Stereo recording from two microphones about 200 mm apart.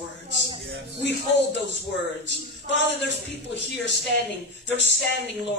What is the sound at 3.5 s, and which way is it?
Speech, 60° left (ahead or behind).